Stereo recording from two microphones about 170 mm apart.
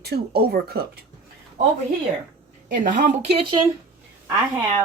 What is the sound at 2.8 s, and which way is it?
Speech, 50° right (ahead or behind).